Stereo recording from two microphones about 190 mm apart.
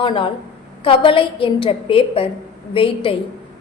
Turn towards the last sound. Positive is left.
turn(degrees=30)  # may be behind; listen again after turning